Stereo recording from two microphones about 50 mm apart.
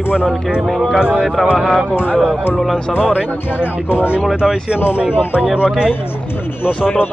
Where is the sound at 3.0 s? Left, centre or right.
Right.